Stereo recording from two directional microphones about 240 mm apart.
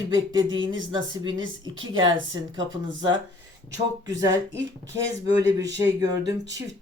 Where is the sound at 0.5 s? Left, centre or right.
Right.